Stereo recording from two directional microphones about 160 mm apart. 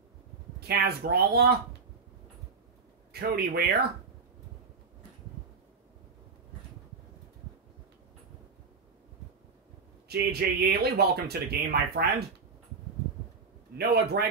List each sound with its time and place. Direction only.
0.6 s speech: 80° right
3.1 s speech: 80° right
10.0 s speech: 85° right
13.7 s speech: 90° right